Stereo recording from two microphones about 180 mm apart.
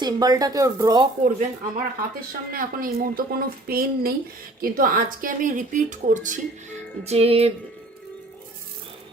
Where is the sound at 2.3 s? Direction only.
55° right (ahead or behind); by 7.5 s 35° right (ahead or behind).